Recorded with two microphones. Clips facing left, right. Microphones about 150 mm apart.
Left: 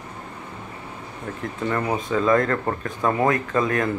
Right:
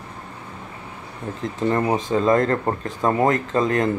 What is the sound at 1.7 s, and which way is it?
Speech, 30° right (ahead or behind).